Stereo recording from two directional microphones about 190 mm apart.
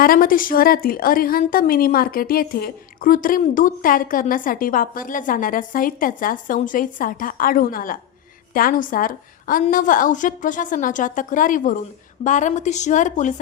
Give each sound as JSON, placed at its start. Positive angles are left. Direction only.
{"t": 0.0, "sound": "a woman's voice", "side_deg": 50}